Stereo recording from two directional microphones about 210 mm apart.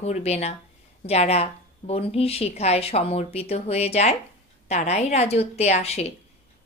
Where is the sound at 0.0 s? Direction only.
30° left (ahead or behind).